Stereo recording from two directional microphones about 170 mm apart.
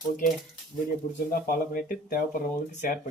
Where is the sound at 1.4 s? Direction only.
55° left (ahead or behind).